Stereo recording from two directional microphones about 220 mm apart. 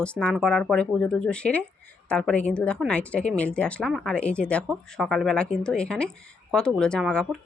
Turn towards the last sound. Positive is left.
turn(degrees=5)  # may be behind; listen again after turning